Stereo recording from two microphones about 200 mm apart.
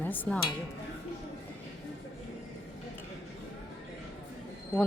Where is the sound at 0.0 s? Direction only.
10° left (ahead or behind).